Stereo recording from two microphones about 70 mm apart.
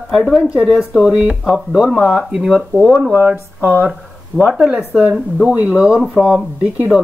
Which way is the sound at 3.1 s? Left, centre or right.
Right.